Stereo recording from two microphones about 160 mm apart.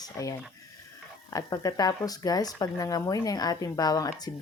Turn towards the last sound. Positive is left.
turn(degrees=25)  # may be behind; listen again after turning